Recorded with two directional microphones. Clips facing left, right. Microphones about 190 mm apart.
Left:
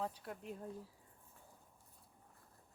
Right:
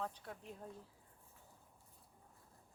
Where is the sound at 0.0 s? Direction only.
10° left (ahead or behind).